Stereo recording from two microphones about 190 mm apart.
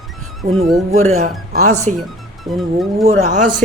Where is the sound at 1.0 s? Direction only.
35° right (ahead or behind).